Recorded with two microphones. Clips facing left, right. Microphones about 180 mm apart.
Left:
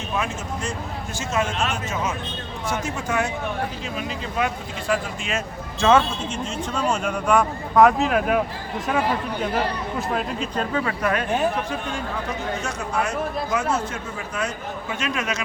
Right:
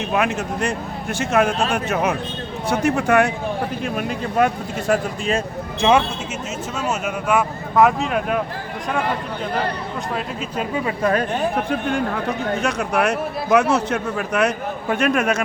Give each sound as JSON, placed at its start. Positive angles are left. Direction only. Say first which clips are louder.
{"t": 0.1, "sound": "a man's voice", "louder": "right 5 dB", "side_deg": -65}
{"t": 1.5, "sound": "speech", "louder": "right 5 dB", "side_deg": -35}
{"t": 1.7, "sound": "speech", "louder": "right 6 dB", "side_deg": -65}
{"t": 5.8, "sound": "speech", "louder": "right 1 dB", "side_deg": -15}
{"t": 6.7, "sound": "speech", "louder": "left 1 dB", "side_deg": -5}
{"t": 11.0, "sound": "speech", "louder": "right 6 dB", "side_deg": -35}
{"t": 11.5, "sound": "a man's voice", "louder": "right 6 dB", "side_deg": -60}